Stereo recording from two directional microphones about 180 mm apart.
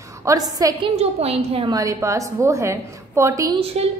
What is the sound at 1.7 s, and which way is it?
A woman's voice, 20° right (ahead or behind).